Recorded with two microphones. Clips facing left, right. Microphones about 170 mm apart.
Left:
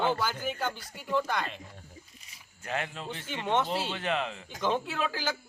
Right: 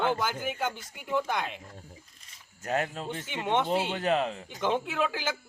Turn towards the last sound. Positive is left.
turn(degrees=-15)  # may be behind; listen again after turning